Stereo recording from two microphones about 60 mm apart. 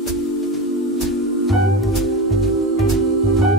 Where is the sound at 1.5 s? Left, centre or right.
Centre.